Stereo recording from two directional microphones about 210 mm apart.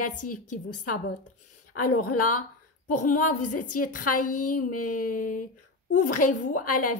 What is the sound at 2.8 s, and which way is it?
A woman's voice, 40° left (ahead or behind).